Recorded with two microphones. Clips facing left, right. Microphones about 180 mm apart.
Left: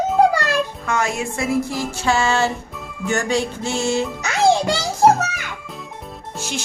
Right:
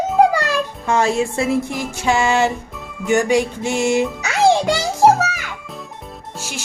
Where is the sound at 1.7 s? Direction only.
20° right (ahead or behind).